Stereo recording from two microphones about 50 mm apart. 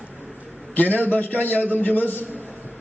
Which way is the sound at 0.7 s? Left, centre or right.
Left.